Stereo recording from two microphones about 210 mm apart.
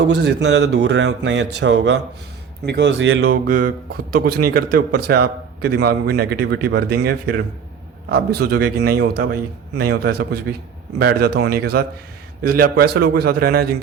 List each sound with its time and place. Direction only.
0.2 s a man's voice: 55° right (ahead or behind)
3.4 s a man's voice: 45° right (ahead or behind)